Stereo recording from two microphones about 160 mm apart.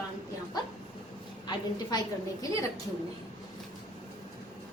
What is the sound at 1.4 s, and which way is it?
A woman's voice, 25° left (ahead or behind).